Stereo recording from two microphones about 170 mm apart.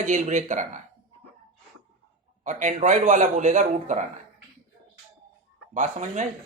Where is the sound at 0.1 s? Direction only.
45° right (ahead or behind).